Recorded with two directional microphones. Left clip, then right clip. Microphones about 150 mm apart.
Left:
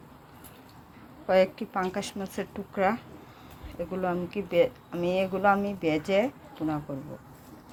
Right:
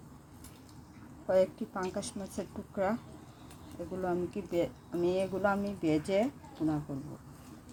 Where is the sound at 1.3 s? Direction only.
10° left (ahead or behind).